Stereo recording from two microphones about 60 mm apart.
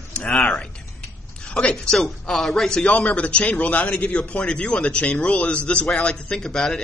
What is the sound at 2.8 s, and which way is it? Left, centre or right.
A man's voice, left.